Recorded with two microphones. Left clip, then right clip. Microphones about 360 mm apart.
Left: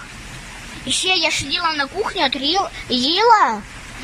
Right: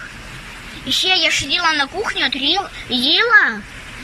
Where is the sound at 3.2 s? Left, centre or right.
Left.